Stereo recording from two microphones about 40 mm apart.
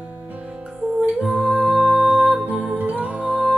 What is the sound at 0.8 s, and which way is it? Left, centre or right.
Music, right.